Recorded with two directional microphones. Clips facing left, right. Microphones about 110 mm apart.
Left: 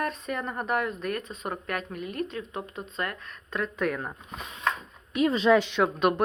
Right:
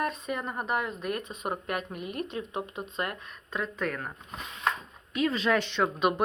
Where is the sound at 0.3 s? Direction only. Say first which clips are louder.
Left 2 dB; 5° right (ahead or behind).